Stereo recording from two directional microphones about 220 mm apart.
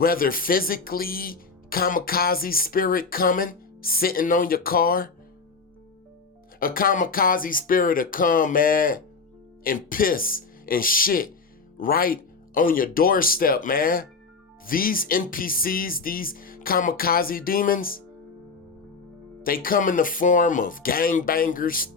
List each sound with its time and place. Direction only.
0.0 s speech: 40° left (ahead or behind)
6.6 s speech: 40° left (ahead or behind)
19.4 s speech: 40° left (ahead or behind)